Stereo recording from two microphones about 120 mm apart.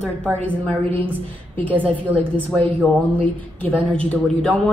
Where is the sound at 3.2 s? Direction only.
15° left (ahead or behind).